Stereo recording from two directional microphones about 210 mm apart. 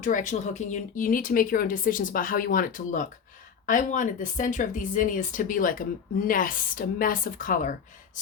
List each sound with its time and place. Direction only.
0.0 s speech: 35° left (ahead or behind)